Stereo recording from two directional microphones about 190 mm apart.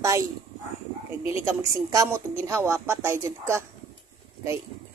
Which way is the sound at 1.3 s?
15° right (ahead or behind).